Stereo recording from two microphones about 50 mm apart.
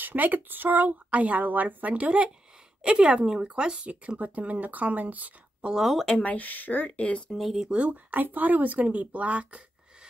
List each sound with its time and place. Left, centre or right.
0.0 s speech: right
2.8 s speech: centre
4.2 s speech: right
5.8 s speech: centre
6.1 s speech: left
7.0 s speech: left
7.3 s speech: centre
7.7 s speech: right
8.1 s speech: right